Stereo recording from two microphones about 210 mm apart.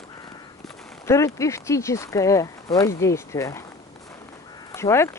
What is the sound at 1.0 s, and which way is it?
Speech, 15° left (ahead or behind).